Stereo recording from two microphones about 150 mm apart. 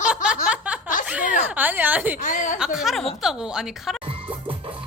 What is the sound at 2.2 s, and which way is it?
Speech, 60° left (ahead or behind).